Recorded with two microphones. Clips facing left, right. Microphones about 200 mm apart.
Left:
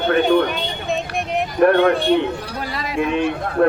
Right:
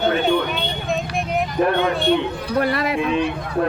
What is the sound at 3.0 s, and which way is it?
Speech, 50° left (ahead or behind).